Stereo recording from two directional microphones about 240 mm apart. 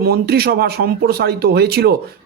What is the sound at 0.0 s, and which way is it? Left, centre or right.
Speech, right.